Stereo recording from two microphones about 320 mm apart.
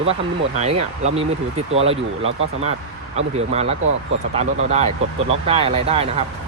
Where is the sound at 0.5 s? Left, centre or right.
Right.